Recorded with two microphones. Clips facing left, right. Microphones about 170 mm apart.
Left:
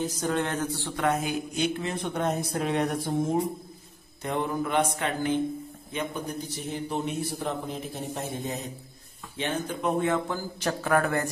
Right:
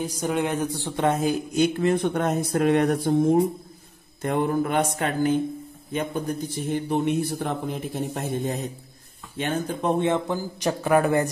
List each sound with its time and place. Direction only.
0.0 s speech: 10° right (ahead or behind); by 1.3 s 30° right (ahead or behind)
1.5 s a man's voice: 50° right (ahead or behind)
4.2 s mantra: 50° right (ahead or behind)
5.9 s a man's voice: 50° right (ahead or behind)
9.4 s mantra: 45° right (ahead or behind)
9.8 s speech: 30° right (ahead or behind)